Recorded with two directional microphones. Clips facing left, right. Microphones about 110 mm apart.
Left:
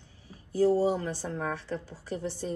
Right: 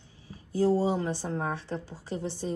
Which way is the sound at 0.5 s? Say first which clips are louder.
Left 1 dB; 25° right (ahead or behind).